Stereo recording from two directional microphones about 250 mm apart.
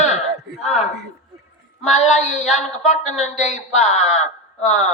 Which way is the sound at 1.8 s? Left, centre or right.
Left.